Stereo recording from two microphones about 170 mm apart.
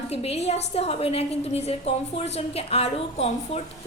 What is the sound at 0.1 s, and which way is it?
A woman's voice, 35° left (ahead or behind).